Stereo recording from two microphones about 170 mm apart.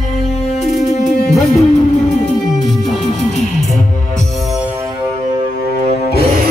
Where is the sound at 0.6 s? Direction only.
Centre (ahead or behind).